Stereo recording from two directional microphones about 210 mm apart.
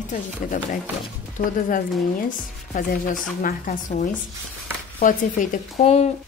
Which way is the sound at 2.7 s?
40° left (ahead or behind).